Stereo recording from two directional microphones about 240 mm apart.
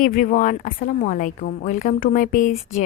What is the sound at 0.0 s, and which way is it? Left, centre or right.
Speech, left.